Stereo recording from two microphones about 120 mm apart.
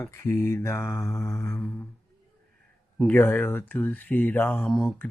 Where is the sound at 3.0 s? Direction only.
15° left (ahead or behind).